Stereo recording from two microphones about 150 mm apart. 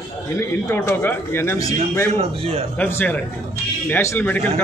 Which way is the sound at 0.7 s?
15° left (ahead or behind).